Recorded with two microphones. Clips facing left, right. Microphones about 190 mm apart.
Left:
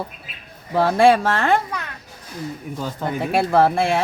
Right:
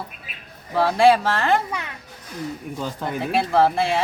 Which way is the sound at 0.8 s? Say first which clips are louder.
Left 1 dB; 50° left (ahead or behind).